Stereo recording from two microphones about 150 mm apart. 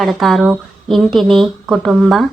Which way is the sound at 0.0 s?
Centre (ahead or behind).